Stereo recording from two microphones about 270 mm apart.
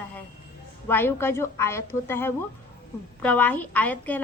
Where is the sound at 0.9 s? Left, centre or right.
Centre.